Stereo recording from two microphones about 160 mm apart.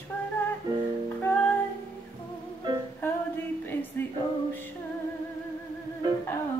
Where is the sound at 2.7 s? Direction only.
30° right (ahead or behind).